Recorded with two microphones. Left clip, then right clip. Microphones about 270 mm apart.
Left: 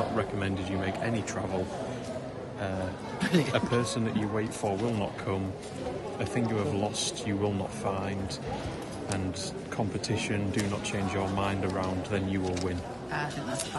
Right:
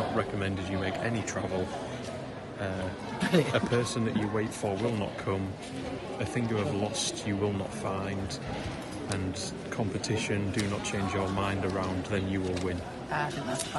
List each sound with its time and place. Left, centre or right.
0.2 s a man's voice: centre
3.2 s speech: centre
3.5 s a man's voice: centre
10.0 s a man's voice: centre
13.1 s speech: centre